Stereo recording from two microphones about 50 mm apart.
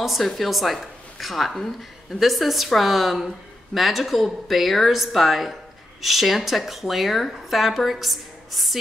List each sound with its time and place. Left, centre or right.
0.0 s speech: centre